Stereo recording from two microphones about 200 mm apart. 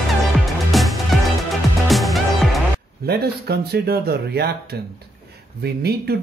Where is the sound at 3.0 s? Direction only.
50° right (ahead or behind).